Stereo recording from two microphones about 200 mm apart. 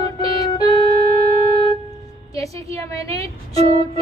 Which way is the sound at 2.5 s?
30° right (ahead or behind).